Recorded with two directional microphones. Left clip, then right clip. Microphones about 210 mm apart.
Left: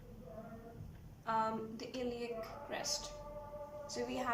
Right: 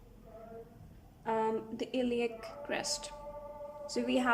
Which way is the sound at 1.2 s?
40° right (ahead or behind).